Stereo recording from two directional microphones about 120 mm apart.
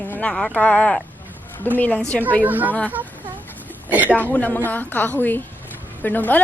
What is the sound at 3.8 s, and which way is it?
Speech, 15° right (ahead or behind).